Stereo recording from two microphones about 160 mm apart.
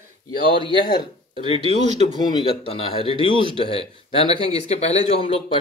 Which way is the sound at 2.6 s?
35° left (ahead or behind).